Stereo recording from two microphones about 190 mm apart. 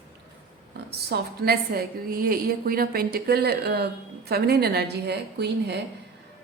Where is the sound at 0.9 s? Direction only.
60° right (ahead or behind).